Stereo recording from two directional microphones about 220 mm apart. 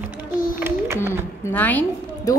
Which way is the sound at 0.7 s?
10° right (ahead or behind).